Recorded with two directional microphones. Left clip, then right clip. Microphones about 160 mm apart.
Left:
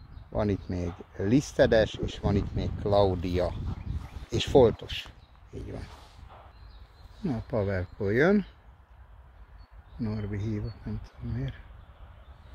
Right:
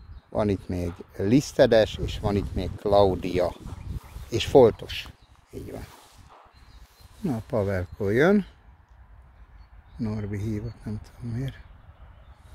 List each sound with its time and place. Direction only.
0.3 s speech: 35° right (ahead or behind)
7.2 s speech: 25° right (ahead or behind)
9.9 s speech: 20° right (ahead or behind)
11.3 s speech: 25° right (ahead or behind)